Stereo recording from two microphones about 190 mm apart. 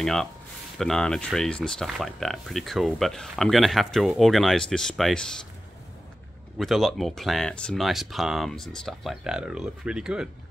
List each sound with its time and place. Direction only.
0.0 s speech: centre (ahead or behind)
6.6 s speech: centre (ahead or behind)